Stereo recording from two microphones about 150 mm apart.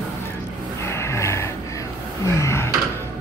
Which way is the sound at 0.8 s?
20° left (ahead or behind).